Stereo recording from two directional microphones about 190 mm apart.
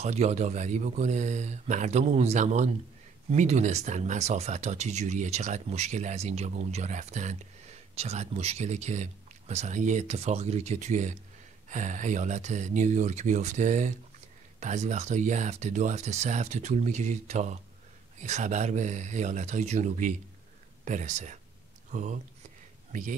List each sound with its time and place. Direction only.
0.0 s speech: 35° right (ahead or behind)